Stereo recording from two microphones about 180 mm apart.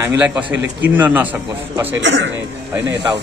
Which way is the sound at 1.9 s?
90° right.